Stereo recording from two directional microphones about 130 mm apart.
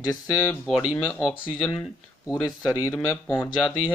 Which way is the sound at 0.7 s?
Centre (ahead or behind).